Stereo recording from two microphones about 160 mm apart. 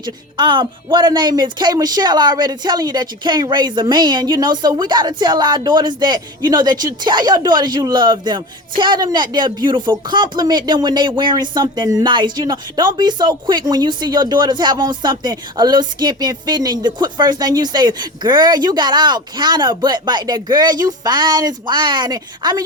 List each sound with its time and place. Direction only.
0.0 s speech: 30° right (ahead or behind)